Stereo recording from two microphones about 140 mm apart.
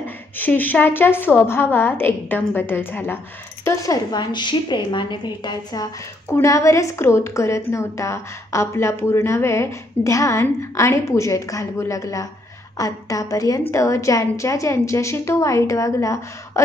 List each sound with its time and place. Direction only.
0.4 s a woman's voice: 15° left (ahead or behind)